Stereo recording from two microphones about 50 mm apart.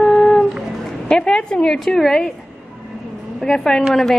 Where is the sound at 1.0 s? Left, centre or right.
Centre.